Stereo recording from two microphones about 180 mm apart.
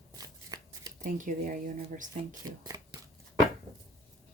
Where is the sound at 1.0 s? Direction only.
45° right (ahead or behind).